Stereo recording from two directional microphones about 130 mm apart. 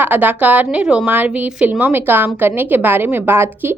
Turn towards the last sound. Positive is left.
turn(degrees=-15)  # may be behind; listen again after turning